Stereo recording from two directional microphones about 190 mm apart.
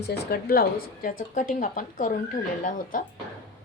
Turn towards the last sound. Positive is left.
turn(degrees=45)  # may be behind; listen again after turning